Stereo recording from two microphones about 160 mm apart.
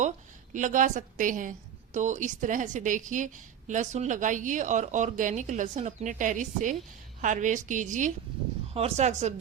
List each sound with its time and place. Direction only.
0.5 s speech: 55° right (ahead or behind)